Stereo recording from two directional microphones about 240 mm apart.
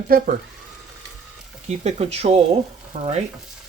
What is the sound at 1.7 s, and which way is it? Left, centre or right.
Speech, right.